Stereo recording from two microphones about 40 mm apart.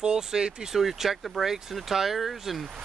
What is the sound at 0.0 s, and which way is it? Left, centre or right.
Speech, centre.